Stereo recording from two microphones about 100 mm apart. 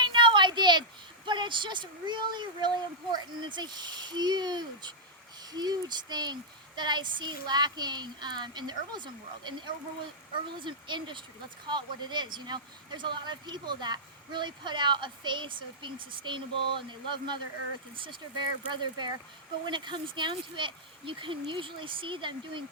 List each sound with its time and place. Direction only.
0.0 s speech: 50° right (ahead or behind)